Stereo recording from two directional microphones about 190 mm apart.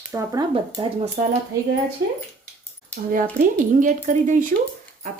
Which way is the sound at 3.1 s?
45° right (ahead or behind).